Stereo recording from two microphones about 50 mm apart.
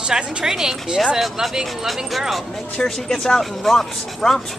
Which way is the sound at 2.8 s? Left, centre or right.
Centre.